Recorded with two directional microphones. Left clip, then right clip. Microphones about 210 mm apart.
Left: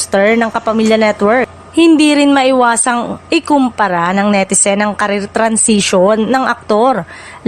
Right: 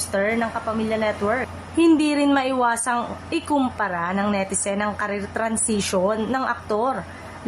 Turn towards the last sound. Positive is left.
turn(degrees=40)  # may be behind; listen again after turning